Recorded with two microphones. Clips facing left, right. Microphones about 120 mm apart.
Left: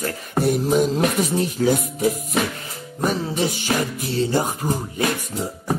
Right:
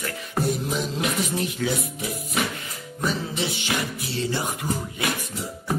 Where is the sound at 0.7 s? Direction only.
45° left (ahead or behind).